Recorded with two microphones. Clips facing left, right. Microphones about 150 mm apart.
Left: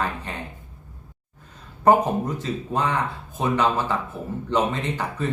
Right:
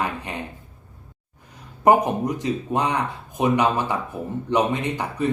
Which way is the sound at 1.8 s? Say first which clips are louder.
Right 1 dB; 15° right (ahead or behind).